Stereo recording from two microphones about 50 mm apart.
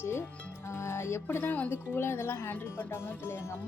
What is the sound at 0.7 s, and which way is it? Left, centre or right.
Speech, left.